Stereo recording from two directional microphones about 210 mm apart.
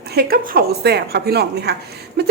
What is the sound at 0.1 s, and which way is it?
A woman's voice, 45° right (ahead or behind).